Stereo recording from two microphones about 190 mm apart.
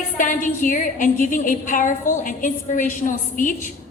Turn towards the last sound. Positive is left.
turn(degrees=45)  # may be behind; listen again after turning